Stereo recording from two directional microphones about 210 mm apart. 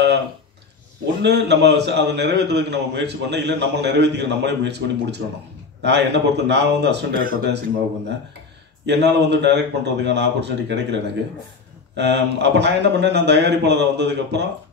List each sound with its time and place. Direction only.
1.2 s a man's voice: 55° right (ahead or behind)
8.8 s speech: 55° right (ahead or behind)
12.0 s speech: 55° right (ahead or behind)